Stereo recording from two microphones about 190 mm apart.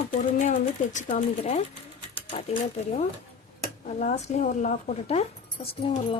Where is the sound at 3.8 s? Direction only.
40° left (ahead or behind).